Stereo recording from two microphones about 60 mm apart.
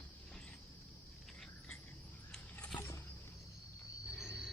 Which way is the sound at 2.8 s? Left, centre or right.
Left.